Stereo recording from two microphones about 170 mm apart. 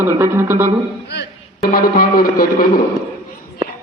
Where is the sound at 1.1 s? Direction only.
75° left (ahead or behind); by 2.7 s 60° left (ahead or behind).